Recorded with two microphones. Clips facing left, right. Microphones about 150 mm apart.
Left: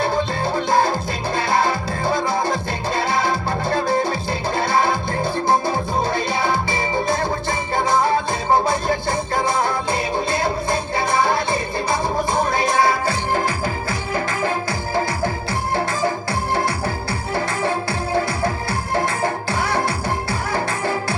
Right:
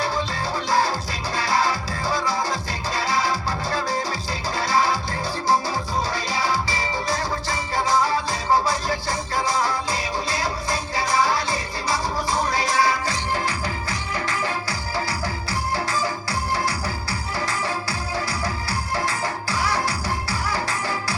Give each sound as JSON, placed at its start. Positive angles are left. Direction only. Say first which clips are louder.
{"t": 0.0, "sound": "music", "louder": "left 5 dB", "side_deg": 55}